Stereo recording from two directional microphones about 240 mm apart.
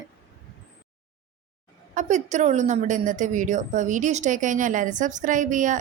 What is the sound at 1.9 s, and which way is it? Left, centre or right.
A woman's voice, right.